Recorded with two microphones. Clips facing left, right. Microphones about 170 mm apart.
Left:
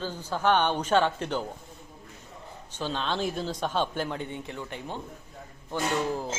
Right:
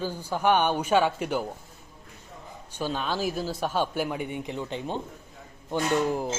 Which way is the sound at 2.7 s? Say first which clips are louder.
Right 1 dB; 10° right (ahead or behind).